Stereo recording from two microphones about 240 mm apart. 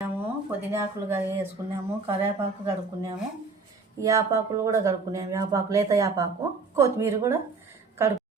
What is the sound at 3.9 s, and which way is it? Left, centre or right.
Speech, centre.